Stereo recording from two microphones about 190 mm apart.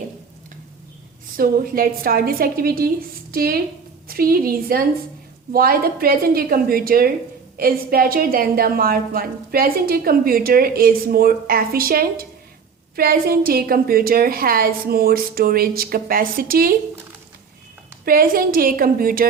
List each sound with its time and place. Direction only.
1.4 s a woman's voice: 50° right (ahead or behind)
18.0 s a woman's voice: 50° right (ahead or behind)